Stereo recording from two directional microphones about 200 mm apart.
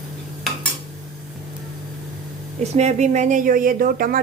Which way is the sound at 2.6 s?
35° right (ahead or behind).